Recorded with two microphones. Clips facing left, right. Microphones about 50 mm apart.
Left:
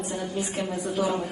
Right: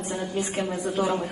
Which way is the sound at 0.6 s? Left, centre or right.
Right.